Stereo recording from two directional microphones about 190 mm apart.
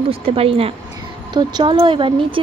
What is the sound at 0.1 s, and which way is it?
A woman's voice, 30° right (ahead or behind).